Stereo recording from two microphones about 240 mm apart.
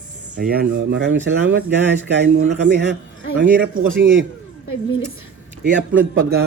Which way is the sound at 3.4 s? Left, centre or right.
Right.